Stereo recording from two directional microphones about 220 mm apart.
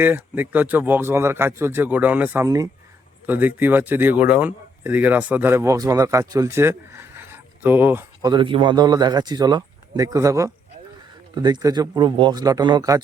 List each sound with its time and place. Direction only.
0.0 s speech: 10° right (ahead or behind)
8.3 s speech: 20° right (ahead or behind)